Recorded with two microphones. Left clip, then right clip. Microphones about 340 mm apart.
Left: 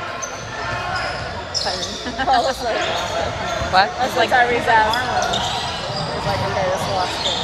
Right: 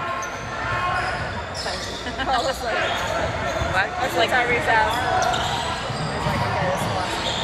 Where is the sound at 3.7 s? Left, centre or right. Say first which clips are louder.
Left 7 dB; left.